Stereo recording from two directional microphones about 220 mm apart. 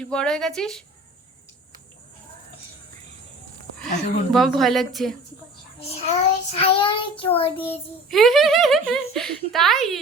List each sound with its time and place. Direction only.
0.0 s speech: 5° left (ahead or behind)
4.3 s speech: centre (ahead or behind)
5.8 s child singing: 30° left (ahead or behind)
7.6 s speech: 5° left (ahead or behind)